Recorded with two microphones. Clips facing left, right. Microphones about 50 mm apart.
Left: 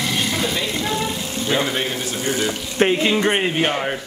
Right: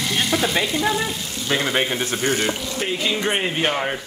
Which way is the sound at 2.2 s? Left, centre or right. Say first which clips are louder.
Right 1 dB; right.